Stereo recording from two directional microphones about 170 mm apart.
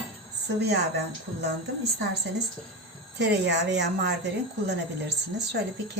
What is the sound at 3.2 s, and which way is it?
Speech, 85° right.